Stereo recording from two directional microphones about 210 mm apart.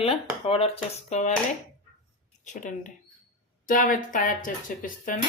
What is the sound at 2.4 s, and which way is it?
Speech, 35° left (ahead or behind).